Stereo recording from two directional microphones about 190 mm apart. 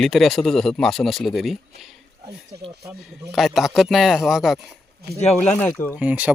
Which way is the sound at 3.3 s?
Centre (ahead or behind).